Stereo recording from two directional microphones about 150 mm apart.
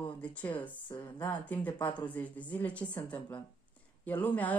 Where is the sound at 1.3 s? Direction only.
10° left (ahead or behind).